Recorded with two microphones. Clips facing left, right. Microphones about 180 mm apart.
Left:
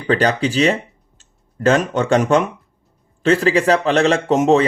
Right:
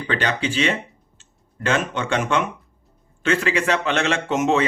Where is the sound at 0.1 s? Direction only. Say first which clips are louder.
Left 7 dB; 40° left (ahead or behind).